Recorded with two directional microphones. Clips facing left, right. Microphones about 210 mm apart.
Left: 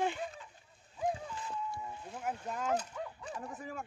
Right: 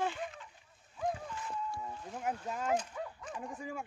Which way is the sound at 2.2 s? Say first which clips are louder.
Right 1 dB; 5° right (ahead or behind).